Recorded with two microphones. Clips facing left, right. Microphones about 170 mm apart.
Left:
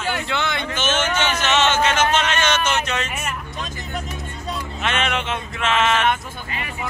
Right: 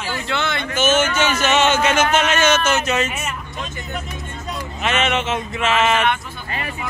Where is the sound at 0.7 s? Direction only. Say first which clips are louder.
Right 6 dB; 10° right (ahead or behind).